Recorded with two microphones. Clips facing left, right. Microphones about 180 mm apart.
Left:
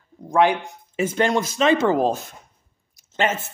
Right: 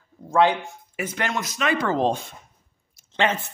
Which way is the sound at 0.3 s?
15° left (ahead or behind).